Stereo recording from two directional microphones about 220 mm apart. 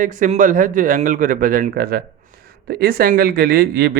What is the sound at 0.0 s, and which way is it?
A man's voice, 35° right (ahead or behind).